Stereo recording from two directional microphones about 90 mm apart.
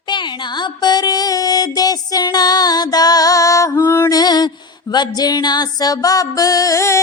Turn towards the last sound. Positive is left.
turn(degrees=35)  # may be behind; listen again after turning